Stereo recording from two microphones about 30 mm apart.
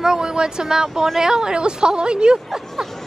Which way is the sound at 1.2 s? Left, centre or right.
Right.